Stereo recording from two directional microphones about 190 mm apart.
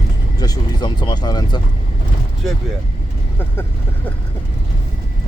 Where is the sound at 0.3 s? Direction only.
20° left (ahead or behind).